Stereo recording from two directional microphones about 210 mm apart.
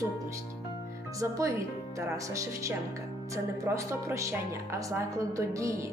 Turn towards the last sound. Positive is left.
turn(degrees=-15)  # may be behind; listen again after turning